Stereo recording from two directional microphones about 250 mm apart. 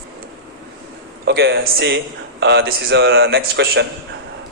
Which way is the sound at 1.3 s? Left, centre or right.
Right.